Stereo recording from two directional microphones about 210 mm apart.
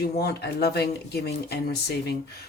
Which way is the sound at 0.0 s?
50° left (ahead or behind).